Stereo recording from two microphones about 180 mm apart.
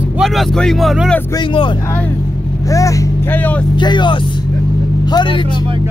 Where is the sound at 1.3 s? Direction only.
25° left (ahead or behind); by 3.6 s 10° left (ahead or behind).